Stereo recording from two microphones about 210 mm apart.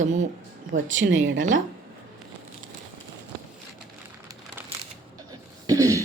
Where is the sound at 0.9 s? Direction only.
65° right (ahead or behind).